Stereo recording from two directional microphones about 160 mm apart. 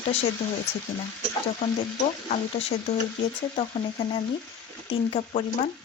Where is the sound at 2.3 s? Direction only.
45° left (ahead or behind).